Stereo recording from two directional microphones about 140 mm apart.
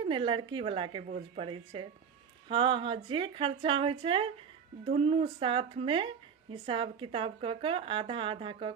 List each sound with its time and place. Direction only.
0.0 s speech: 35° right (ahead or behind)